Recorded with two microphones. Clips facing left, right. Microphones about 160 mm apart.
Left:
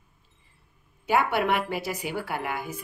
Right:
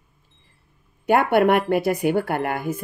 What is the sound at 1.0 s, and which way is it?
Speech, 55° right (ahead or behind).